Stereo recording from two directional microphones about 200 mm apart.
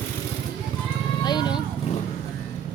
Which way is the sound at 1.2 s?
20° left (ahead or behind).